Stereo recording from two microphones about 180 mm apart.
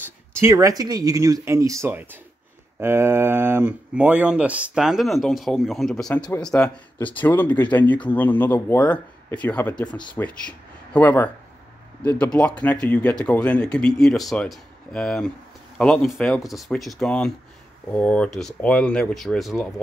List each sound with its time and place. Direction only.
0.3 s speech: 15° right (ahead or behind); by 9.8 s 10° left (ahead or behind)
9.8 s speech: 25° left (ahead or behind)
10.1 s speech: 5° left (ahead or behind)